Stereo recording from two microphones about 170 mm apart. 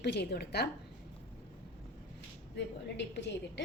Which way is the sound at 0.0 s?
75° left (ahead or behind).